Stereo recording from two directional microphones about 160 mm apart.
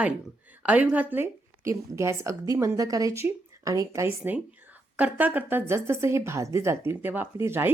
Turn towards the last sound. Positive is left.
turn(degrees=-15)  # may be behind; listen again after turning